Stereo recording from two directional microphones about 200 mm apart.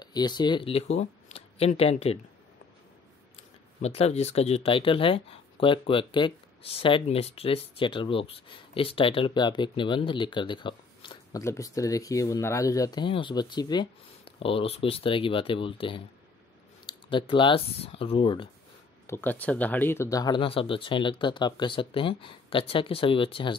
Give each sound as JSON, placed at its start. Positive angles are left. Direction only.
{"t": 0.0, "sound": "speech", "side_deg": 20}
{"t": 3.3, "sound": "speech", "side_deg": 30}
{"t": 19.0, "sound": "speech", "side_deg": 10}